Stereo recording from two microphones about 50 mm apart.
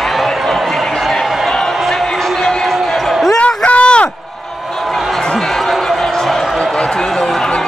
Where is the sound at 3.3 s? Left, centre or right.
Left.